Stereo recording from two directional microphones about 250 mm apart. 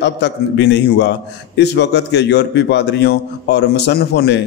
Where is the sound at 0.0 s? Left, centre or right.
Left.